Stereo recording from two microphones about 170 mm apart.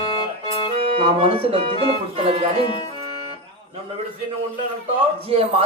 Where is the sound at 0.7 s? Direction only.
35° right (ahead or behind).